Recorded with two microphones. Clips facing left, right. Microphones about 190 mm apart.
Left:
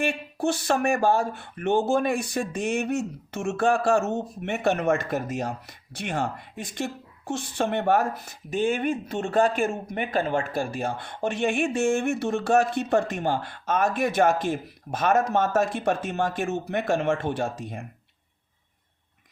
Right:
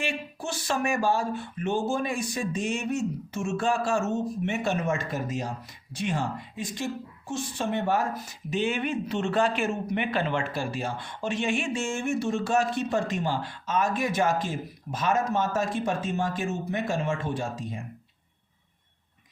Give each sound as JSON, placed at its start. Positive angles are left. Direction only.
{"t": 0.0, "sound": "speech", "side_deg": 60}